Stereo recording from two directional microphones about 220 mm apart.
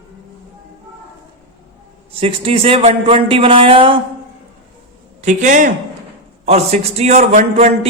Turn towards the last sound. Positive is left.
turn(degrees=-30)  # may be behind; listen again after turning